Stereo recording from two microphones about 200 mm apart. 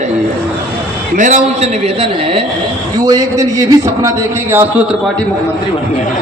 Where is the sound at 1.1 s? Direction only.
40° right (ahead or behind).